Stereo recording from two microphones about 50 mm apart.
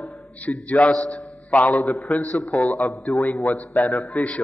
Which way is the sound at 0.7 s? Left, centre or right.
Left.